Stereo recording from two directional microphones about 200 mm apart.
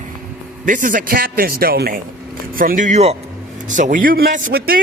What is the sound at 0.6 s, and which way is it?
A man's voice, 40° right (ahead or behind).